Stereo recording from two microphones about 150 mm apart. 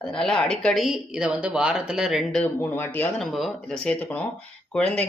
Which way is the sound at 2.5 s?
15° left (ahead or behind).